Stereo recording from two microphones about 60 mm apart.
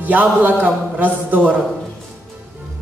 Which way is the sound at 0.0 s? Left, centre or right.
Right.